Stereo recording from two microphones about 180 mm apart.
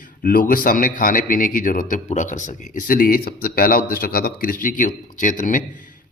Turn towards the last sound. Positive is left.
turn(degrees=45)  # may be behind; listen again after turning